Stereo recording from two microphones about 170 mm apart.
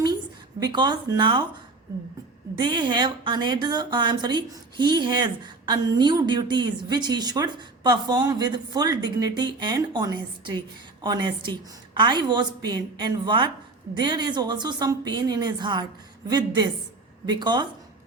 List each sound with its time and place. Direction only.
0.6 s a woman's voice: 25° right (ahead or behind)
2.6 s a woman's voice: 25° right (ahead or behind)
17.2 s a woman's voice: 25° right (ahead or behind)